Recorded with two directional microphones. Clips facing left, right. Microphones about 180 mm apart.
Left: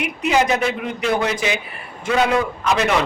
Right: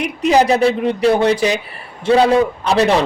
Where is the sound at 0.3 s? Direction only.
35° right (ahead or behind).